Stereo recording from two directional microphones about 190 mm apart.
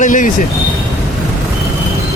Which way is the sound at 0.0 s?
45° left (ahead or behind).